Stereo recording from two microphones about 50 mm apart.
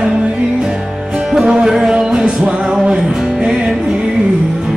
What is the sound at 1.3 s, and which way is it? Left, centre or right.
Music, centre.